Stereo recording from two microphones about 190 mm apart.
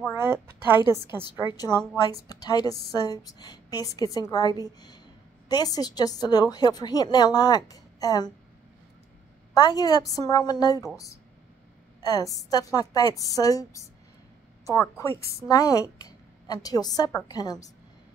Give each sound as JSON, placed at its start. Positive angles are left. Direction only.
{"t": 0.1, "sound": "speech", "side_deg": -10}
{"t": 2.2, "sound": "a woman's voice", "side_deg": 20}
{"t": 9.5, "sound": "a woman's voice", "side_deg": 20}
{"t": 12.0, "sound": "a woman's voice", "side_deg": 20}